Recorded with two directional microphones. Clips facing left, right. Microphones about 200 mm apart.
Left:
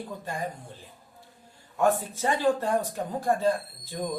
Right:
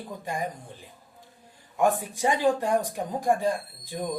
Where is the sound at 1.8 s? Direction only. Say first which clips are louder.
Right 1 dB; 15° right (ahead or behind).